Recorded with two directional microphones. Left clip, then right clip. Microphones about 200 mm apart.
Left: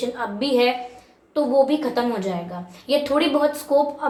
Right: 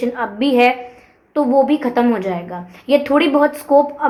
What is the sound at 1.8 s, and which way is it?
A woman's voice, 45° right (ahead or behind).